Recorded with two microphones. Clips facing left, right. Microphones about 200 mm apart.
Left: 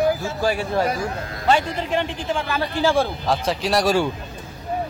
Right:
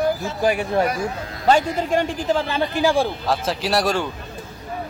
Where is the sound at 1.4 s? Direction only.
45° right (ahead or behind).